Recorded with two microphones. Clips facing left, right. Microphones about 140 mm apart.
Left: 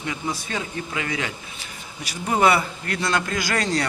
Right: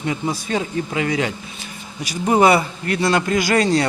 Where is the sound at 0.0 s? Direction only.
30° right (ahead or behind).